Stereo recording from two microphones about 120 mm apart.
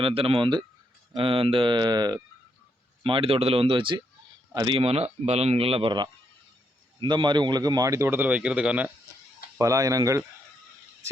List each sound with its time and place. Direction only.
0.0 s speech: 50° right (ahead or behind); by 2.1 s 35° right (ahead or behind)
3.0 s speech: 50° right (ahead or behind)
4.8 s speech: 55° right (ahead or behind); by 8.9 s 10° right (ahead or behind)
9.6 s speech: 30° right (ahead or behind)